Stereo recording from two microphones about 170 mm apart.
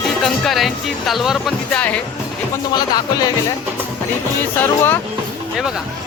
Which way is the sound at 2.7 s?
25° left (ahead or behind).